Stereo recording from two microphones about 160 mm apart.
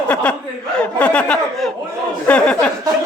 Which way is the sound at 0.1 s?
5° left (ahead or behind).